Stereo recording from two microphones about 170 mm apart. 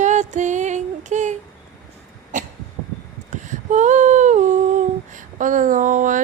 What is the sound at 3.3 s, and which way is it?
Humming, 45° right (ahead or behind).